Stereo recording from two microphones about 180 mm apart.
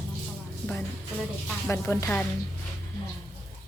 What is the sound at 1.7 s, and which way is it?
Speech, 15° left (ahead or behind).